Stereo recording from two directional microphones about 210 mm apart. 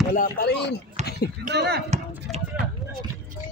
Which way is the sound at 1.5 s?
50° right (ahead or behind).